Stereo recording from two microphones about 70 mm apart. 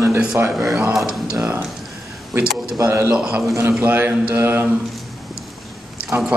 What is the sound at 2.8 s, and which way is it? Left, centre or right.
Speech, right.